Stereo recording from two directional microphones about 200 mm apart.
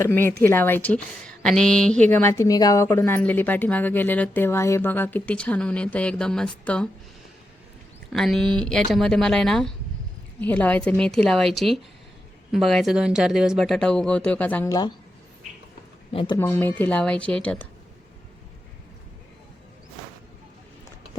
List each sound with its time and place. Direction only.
0.0 s speech: 10° left (ahead or behind)
8.1 s speech: centre (ahead or behind); by 14.9 s 20° left (ahead or behind)
16.1 s speech: 25° left (ahead or behind)
16.4 s speech: 10° left (ahead or behind)